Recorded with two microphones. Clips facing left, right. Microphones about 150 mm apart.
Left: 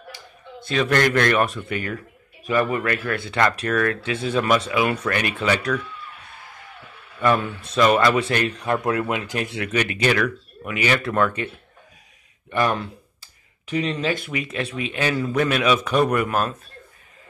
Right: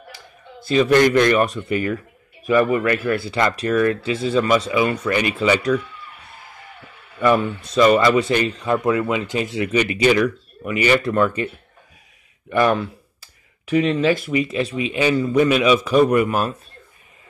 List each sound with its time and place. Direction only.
0.7 s speech: 5° right (ahead or behind)
2.5 s a man's voice: 40° right (ahead or behind)
3.2 s speech: centre (ahead or behind)
7.2 s speech: centre (ahead or behind)
14.1 s speech: centre (ahead or behind)